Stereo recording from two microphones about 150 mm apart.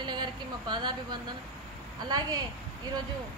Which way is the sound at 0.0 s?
30° right (ahead or behind).